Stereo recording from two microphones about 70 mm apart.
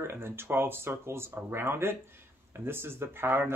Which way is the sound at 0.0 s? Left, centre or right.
Right.